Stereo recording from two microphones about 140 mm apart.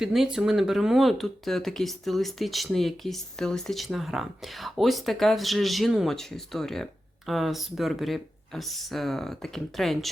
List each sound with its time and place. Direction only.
0.0 s speech: 5° right (ahead or behind)